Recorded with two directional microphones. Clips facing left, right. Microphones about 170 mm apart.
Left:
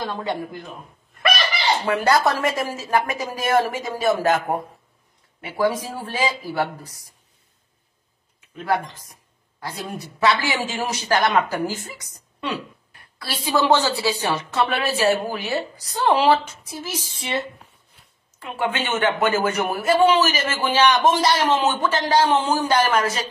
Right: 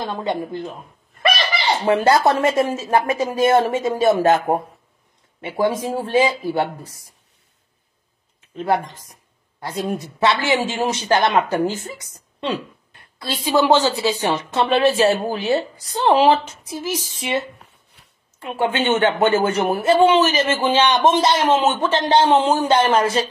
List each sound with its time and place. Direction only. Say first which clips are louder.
0.0 s speech: right 3 dB; 20° right (ahead or behind)
1.9 s speech: right 5 dB; 25° right (ahead or behind)
8.5 s a woman's voice: right 3 dB; 20° right (ahead or behind)
18.4 s speech: right 4 dB; 25° right (ahead or behind)